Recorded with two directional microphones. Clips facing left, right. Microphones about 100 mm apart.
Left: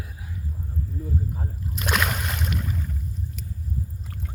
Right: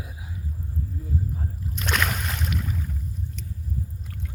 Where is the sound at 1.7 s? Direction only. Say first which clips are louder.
Left 1 dB; 5° left (ahead or behind).